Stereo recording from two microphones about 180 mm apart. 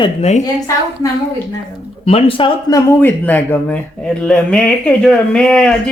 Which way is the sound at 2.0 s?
35° left (ahead or behind).